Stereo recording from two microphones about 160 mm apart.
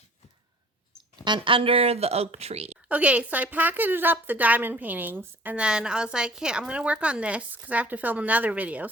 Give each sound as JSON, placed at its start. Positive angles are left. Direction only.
{"t": 1.2, "sound": "speech", "side_deg": -30}
{"t": 2.9, "sound": "a woman's voice", "side_deg": -10}